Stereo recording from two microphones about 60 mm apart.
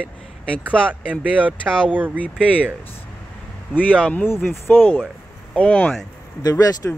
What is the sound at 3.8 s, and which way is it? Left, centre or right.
Speech, left.